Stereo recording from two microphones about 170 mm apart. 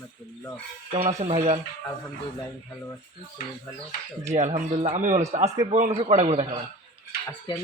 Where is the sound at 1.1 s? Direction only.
40° right (ahead or behind).